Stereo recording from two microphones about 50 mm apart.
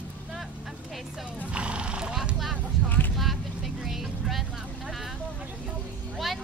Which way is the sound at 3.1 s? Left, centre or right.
Centre.